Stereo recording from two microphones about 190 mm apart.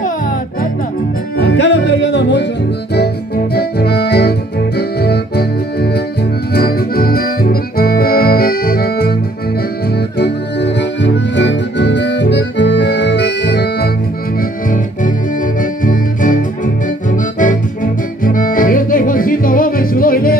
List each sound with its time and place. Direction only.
1.4 s music: 65° left (ahead or behind)
3.5 s music: 55° left (ahead or behind)
6.5 s accordion: 55° left (ahead or behind)
10.1 s music: 60° left (ahead or behind)
15.8 s music: 45° left (ahead or behind)